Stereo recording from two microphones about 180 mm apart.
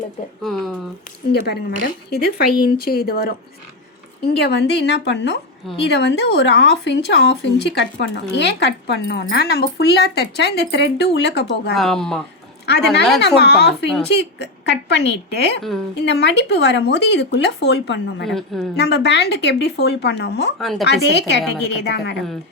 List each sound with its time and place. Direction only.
0.4 s speech: centre (ahead or behind)
1.3 s a woman's voice: 60° left (ahead or behind)
4.4 s speech: 65° left (ahead or behind)
11.7 s speech: centre (ahead or behind)
12.6 s a woman's voice: 65° left (ahead or behind)
18.3 s speech: centre (ahead or behind)
18.8 s speech: 70° left (ahead or behind)
20.6 s speech: centre (ahead or behind)
20.8 s speech: 70° left (ahead or behind)